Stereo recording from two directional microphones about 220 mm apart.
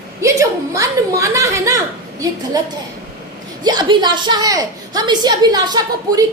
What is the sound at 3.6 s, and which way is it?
A woman's voice, 20° right (ahead or behind).